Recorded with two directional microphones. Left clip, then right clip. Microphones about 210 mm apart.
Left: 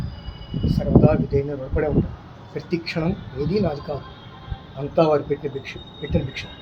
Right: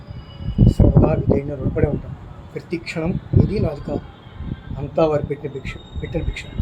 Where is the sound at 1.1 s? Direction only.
Centre (ahead or behind).